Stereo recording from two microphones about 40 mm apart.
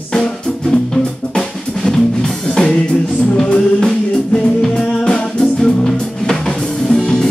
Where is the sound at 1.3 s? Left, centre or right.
Centre.